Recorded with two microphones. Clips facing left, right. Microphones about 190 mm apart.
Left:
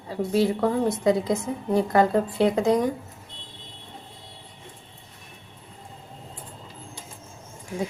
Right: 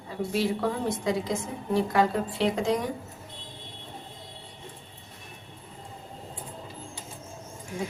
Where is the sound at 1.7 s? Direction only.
45° left (ahead or behind).